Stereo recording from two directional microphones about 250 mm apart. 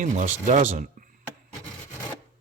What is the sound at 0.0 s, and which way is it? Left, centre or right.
Speech, right.